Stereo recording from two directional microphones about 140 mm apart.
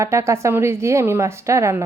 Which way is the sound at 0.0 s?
20° right (ahead or behind).